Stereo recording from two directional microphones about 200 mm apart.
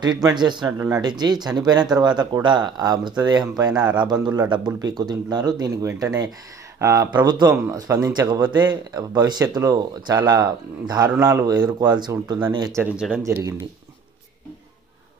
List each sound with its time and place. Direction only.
0.0 s speech: 20° right (ahead or behind)
12.8 s speech: 5° right (ahead or behind)
13.2 s speech: 15° right (ahead or behind)